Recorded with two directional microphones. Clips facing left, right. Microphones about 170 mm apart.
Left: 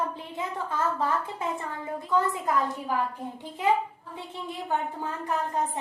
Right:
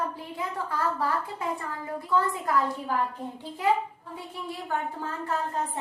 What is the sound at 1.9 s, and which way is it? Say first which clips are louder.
Speech: even; 20° left (ahead or behind).